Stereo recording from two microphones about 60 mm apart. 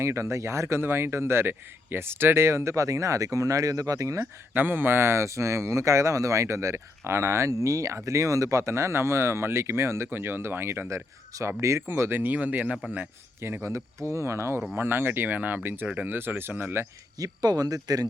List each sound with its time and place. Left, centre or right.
0.0 s speech: right
4.5 s speech: right
13.4 s speech: right
13.7 s speech: right
14.8 s speech: right
17.2 s speech: right